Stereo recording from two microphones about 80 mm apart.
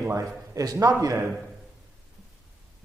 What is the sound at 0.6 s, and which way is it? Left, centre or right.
Speech, right.